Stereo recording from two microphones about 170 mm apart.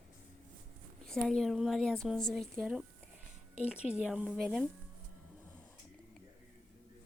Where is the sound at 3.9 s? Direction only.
10° right (ahead or behind).